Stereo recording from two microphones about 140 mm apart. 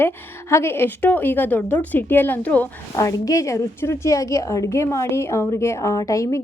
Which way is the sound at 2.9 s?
25° left (ahead or behind).